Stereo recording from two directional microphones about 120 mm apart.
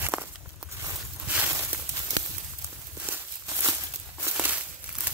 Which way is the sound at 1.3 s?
15° right (ahead or behind).